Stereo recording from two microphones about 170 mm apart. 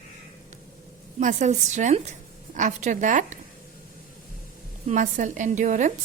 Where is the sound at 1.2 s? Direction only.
45° right (ahead or behind).